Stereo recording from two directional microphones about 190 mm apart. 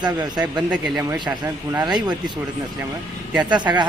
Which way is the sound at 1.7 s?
15° right (ahead or behind).